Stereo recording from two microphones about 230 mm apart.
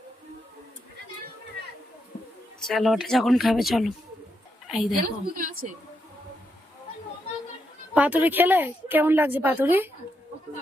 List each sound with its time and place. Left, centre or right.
2.6 s a woman's voice: centre
5.2 s a woman's voice: right
7.9 s a woman's voice: centre